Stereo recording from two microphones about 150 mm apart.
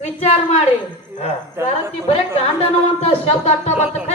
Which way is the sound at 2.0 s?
45° left (ahead or behind).